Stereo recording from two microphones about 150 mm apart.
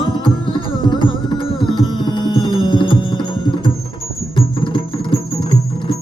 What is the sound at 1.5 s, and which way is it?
Music, 30° left (ahead or behind).